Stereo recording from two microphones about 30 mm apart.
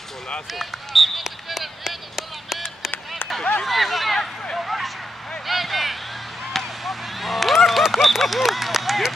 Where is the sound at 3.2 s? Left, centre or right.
Left.